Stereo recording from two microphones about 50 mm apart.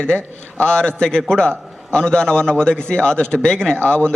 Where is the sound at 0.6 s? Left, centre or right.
Centre.